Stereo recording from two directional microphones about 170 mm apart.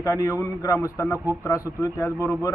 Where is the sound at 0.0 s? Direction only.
20° left (ahead or behind).